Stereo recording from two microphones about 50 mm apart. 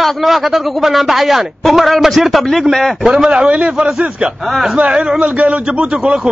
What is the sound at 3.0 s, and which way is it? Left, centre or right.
A man's voice, centre.